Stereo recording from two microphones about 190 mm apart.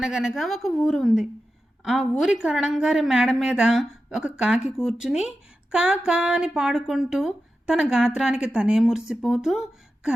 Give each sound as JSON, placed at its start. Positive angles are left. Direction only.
{"t": 0.0, "sound": "a woman's voice", "side_deg": -5}